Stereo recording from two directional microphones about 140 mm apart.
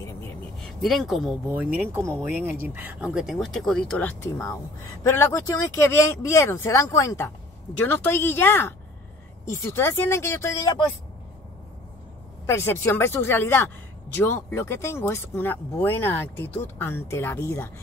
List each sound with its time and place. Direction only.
0.0 s vehicle: 20° left (ahead or behind)
0.6 s speech: centre (ahead or behind)
4.3 s speech: 20° left (ahead or behind)
12.4 s speech: 20° left (ahead or behind)